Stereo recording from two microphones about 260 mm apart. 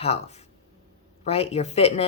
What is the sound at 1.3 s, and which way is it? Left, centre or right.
Speech, left.